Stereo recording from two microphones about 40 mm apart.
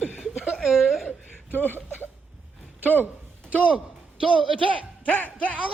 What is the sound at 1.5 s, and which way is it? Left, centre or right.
Speech, left.